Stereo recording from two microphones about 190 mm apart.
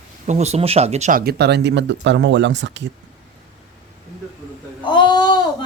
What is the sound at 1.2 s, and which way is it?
Speech, 60° right (ahead or behind).